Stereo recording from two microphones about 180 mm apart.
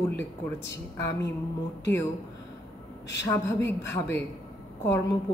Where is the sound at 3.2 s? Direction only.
10° left (ahead or behind).